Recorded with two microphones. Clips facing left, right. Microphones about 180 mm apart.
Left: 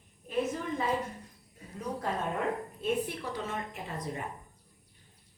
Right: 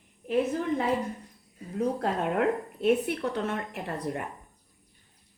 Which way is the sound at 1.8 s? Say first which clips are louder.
Right 6 dB; 65° right (ahead or behind).